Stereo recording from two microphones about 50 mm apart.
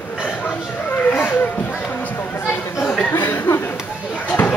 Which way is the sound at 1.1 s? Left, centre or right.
Left.